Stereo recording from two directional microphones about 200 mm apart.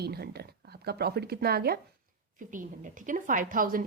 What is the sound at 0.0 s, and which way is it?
Speech, 50° right (ahead or behind).